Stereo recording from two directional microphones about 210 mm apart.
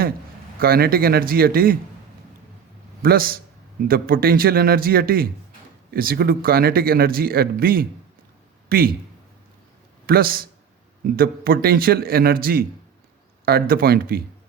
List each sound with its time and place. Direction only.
0.6 s speech: 45° right (ahead or behind)
3.0 s speech: 45° right (ahead or behind)
10.1 s speech: 45° right (ahead or behind)